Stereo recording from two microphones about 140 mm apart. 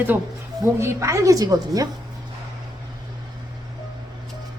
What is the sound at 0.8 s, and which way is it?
A woman's voice, 20° right (ahead or behind).